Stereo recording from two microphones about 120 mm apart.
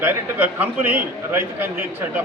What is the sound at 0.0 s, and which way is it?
A man's voice, 15° right (ahead or behind).